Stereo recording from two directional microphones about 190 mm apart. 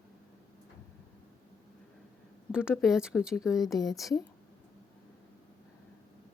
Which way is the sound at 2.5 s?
5° right (ahead or behind).